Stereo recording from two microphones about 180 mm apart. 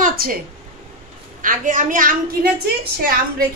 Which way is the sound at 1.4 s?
45° right (ahead or behind).